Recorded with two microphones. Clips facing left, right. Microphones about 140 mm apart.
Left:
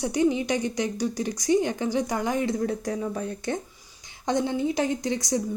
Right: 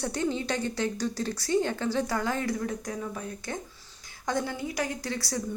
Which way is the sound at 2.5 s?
35° left (ahead or behind).